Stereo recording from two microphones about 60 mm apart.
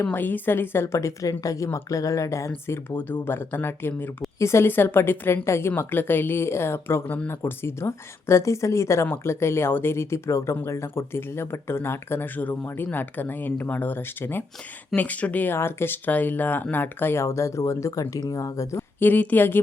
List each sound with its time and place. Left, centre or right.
0.0 s a woman's voice: left
0.9 s speech: left
2.6 s a woman's voice: left
4.4 s speech: left
4.7 s a woman's voice: left
12.4 s a woman's voice: left
14.9 s speech: left
15.5 s speech: left
16.0 s a woman's voice: left
18.9 s a woman's voice: left